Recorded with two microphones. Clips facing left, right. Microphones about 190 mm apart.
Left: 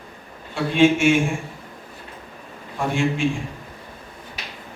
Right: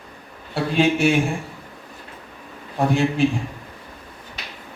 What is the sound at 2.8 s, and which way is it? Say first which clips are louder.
Speech: right 4 dB; 40° right (ahead or behind).